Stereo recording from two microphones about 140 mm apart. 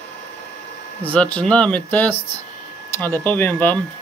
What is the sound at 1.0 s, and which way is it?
Speech, 10° left (ahead or behind).